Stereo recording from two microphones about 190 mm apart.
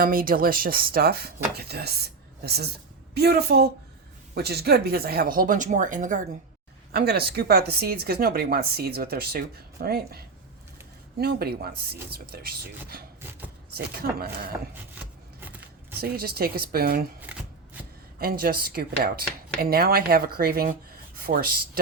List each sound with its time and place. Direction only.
0.0 s speech: 50° right (ahead or behind)
6.9 s speech: 55° right (ahead or behind)
16.0 s speech: 55° right (ahead or behind)
18.2 s speech: 50° right (ahead or behind)